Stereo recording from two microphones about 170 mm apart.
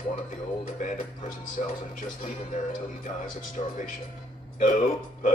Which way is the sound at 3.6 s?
40° left (ahead or behind).